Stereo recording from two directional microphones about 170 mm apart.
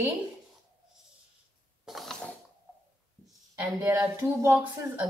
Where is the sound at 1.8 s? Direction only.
Centre (ahead or behind).